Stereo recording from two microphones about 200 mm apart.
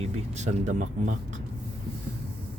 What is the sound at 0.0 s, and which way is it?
Speech, 35° right (ahead or behind).